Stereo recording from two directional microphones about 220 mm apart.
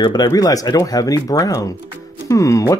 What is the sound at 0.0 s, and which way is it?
Speech, 20° left (ahead or behind).